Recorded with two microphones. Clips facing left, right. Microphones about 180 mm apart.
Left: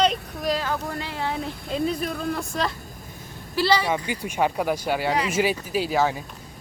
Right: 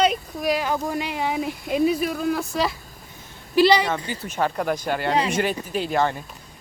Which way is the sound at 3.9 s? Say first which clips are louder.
Left 1 dB; 10° left (ahead or behind).